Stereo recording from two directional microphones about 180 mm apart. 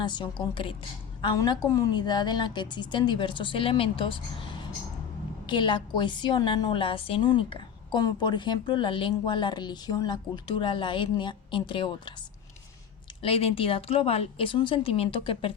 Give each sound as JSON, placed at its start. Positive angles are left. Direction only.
{"t": 0.0, "sound": "a woman's voice", "side_deg": 25}
{"t": 13.2, "sound": "a woman's voice", "side_deg": 30}